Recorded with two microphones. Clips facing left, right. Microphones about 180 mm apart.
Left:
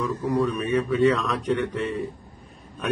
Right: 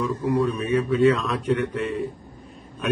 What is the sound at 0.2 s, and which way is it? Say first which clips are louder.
A man's voice: right 1 dB; centre (ahead or behind).